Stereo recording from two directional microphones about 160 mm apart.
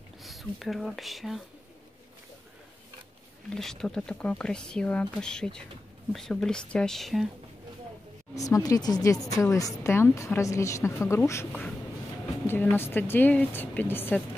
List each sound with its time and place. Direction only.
0.2 s speech: centre (ahead or behind)
3.5 s speech: 5° left (ahead or behind)
8.4 s a woman's voice: 20° left (ahead or behind)